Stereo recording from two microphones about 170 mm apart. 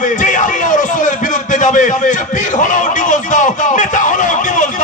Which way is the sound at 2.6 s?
50° left (ahead or behind).